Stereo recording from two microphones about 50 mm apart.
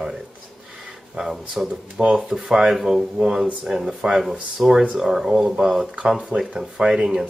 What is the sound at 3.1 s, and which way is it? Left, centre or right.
Speech, centre.